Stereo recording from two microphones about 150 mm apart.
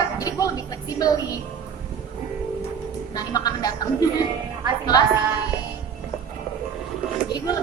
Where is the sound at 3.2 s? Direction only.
25° left (ahead or behind).